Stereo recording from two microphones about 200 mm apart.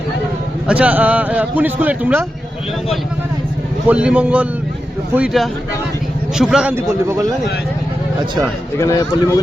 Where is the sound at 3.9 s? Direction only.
5° right (ahead or behind).